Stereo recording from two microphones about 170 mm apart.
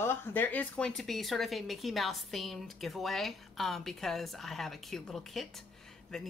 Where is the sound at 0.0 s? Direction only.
15° left (ahead or behind).